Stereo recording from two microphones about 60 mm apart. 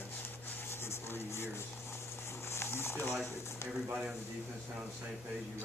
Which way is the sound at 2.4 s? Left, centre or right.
Left.